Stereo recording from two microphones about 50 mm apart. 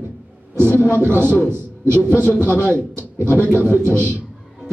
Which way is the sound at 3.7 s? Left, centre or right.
Left.